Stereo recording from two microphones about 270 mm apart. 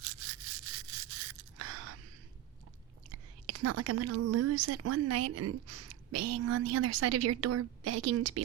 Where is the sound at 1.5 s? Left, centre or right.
Right.